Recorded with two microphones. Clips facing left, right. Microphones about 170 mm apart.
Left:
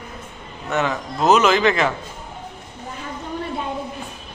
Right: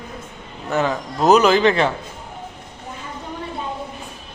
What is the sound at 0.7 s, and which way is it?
Speech, 30° right (ahead or behind).